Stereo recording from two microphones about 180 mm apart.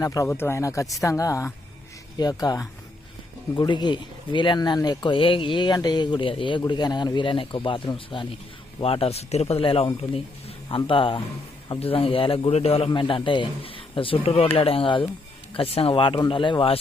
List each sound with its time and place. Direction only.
0.0 s a man's voice: 20° left (ahead or behind)